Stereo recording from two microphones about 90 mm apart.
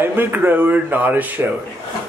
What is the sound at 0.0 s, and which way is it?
Speech, 20° right (ahead or behind).